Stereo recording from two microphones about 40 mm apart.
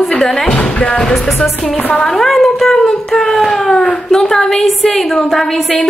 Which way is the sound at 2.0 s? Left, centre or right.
Centre.